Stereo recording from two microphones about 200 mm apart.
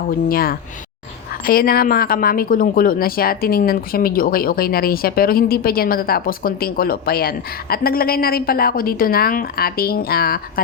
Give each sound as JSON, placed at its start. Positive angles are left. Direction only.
{"t": 0.3, "sound": "a woman's voice", "side_deg": 45}